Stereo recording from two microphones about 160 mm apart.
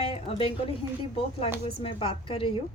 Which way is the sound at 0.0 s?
35° left (ahead or behind).